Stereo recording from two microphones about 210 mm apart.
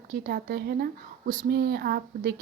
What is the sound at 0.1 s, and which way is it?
Speech, 45° right (ahead or behind).